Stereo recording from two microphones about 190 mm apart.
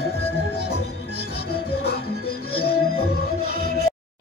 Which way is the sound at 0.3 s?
60° left (ahead or behind).